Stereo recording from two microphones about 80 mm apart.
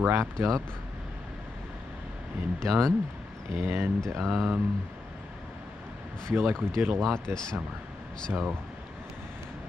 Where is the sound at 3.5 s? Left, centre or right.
Right.